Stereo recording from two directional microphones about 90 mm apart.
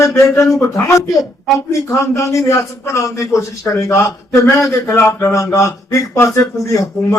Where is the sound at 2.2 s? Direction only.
35° left (ahead or behind).